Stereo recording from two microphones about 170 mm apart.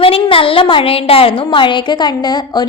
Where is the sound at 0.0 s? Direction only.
30° left (ahead or behind).